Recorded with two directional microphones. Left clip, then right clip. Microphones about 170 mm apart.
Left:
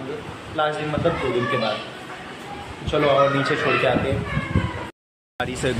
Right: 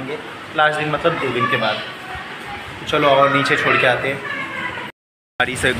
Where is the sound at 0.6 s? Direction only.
Centre (ahead or behind).